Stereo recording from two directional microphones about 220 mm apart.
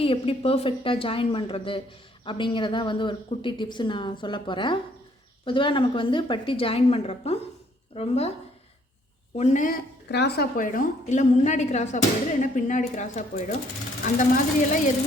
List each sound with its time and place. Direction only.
0.0 s a woman's voice: 25° left (ahead or behind)
9.3 s a woman's voice: 30° left (ahead or behind)
10.1 s a woman's voice: 50° left (ahead or behind)